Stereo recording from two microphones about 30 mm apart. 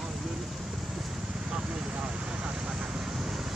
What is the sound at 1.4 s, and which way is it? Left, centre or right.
Vehicle, right.